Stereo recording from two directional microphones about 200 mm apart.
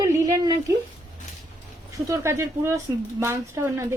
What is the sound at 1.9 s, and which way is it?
A woman's voice, 15° right (ahead or behind).